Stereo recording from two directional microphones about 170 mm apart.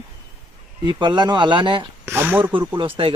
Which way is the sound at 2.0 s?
15° right (ahead or behind).